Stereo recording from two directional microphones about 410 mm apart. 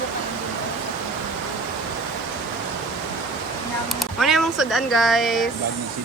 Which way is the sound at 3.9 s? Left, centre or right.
Centre.